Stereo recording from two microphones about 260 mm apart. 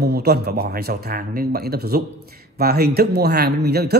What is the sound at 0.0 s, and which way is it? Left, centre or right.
Speech, right.